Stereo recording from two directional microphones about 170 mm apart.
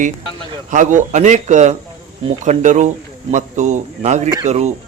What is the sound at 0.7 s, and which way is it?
A man's voice, 45° right (ahead or behind).